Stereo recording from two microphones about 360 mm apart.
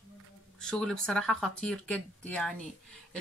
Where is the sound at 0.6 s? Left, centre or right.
Centre.